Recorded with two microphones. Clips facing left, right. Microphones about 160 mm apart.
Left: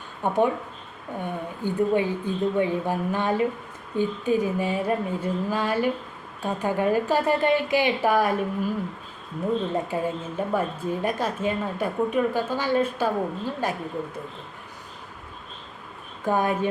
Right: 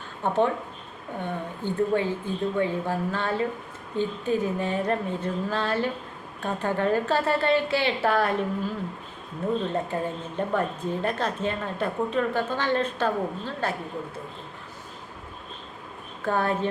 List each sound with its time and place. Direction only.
0.2 s a woman's voice: 10° left (ahead or behind)
9.9 s a woman's voice: 5° left (ahead or behind)
16.2 s a woman's voice: 15° left (ahead or behind)